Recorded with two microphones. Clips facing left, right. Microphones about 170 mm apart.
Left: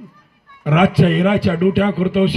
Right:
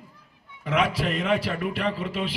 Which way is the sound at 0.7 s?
60° left (ahead or behind).